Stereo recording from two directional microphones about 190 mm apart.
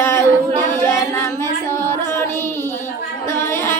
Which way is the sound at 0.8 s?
15° left (ahead or behind).